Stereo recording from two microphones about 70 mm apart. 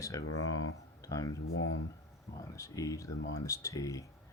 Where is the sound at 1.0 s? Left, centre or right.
Left.